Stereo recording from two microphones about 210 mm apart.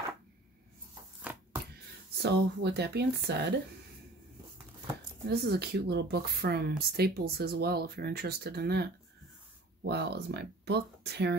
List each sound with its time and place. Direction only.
2.2 s speech: 50° right (ahead or behind)
5.3 s speech: 50° right (ahead or behind)
9.8 s speech: 50° right (ahead or behind)